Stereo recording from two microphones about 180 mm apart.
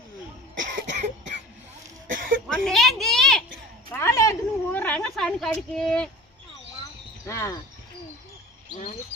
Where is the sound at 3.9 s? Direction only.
15° left (ahead or behind).